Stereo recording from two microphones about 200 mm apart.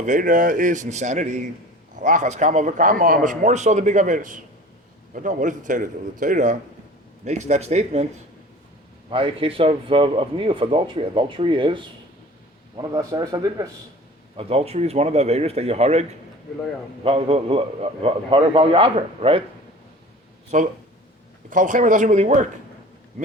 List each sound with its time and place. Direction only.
0.0 s a man's voice: 40° right (ahead or behind)
9.0 s speech: 25° right (ahead or behind)
14.3 s a man's voice: 30° right (ahead or behind)
20.5 s a man's voice: 40° right (ahead or behind)